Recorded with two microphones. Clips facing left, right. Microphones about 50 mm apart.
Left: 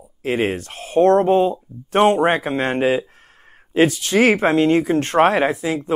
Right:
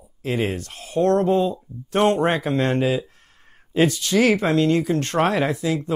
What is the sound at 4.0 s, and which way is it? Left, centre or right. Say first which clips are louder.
Speech: left 3 dB; left.